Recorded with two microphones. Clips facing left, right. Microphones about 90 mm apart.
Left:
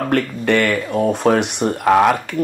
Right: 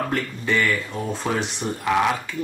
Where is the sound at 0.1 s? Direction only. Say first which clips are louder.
Left 7 dB; 65° left (ahead or behind).